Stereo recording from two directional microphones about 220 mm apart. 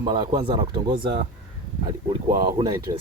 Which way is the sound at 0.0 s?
20° right (ahead or behind).